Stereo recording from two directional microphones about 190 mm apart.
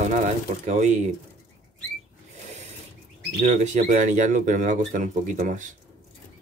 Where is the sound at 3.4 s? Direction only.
40° right (ahead or behind).